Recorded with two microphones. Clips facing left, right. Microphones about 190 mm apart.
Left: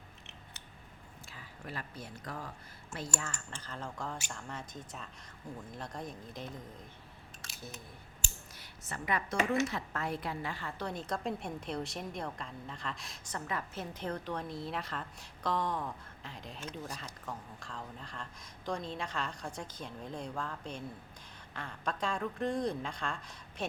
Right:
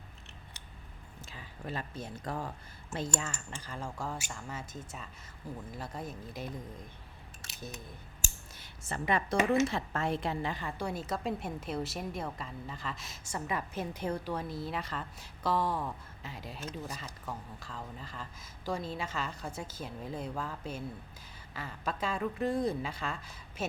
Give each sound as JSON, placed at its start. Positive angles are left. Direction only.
{"t": 1.3, "sound": "speech", "side_deg": -25}
{"t": 3.2, "sound": "a woman's voice", "side_deg": -15}
{"t": 7.4, "sound": "scissors", "side_deg": -20}
{"t": 8.5, "sound": "speech", "side_deg": -25}
{"t": 13.5, "sound": "a woman's voice", "side_deg": -10}